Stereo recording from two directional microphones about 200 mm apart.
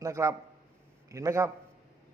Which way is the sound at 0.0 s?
15° right (ahead or behind).